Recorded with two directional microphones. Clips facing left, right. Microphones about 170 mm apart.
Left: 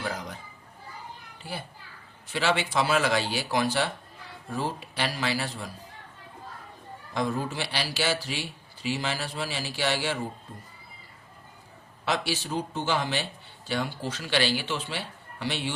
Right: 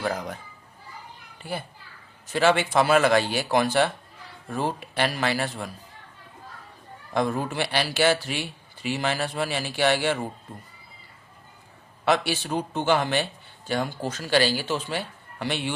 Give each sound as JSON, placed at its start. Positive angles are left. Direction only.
{"t": 2.2, "sound": "a man's voice", "side_deg": -50}
{"t": 7.1, "sound": "speech", "side_deg": -55}
{"t": 12.0, "sound": "a man's voice", "side_deg": -55}